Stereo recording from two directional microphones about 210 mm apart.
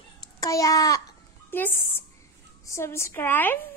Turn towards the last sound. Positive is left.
turn(degrees=10)  # may be behind; listen again after turning